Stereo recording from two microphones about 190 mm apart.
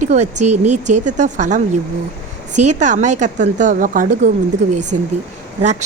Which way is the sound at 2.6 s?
40° right (ahead or behind).